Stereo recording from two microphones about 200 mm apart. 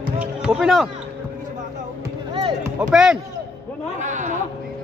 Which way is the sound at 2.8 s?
5° right (ahead or behind).